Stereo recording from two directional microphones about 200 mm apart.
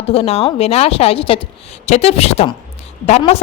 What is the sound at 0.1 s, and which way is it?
A woman's voice, 30° left (ahead or behind).